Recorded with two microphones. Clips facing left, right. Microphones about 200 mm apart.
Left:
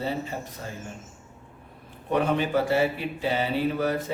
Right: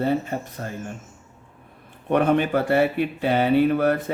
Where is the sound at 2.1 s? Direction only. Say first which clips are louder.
Right 4 dB; 55° right (ahead or behind).